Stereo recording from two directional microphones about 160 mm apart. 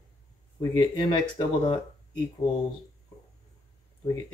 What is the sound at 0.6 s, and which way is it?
Speech, 30° left (ahead or behind).